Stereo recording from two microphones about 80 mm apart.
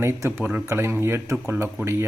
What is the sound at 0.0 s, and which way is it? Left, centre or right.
Speech, right.